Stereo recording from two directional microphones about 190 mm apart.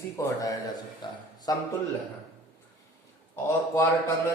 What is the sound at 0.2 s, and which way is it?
A man's voice, 15° left (ahead or behind).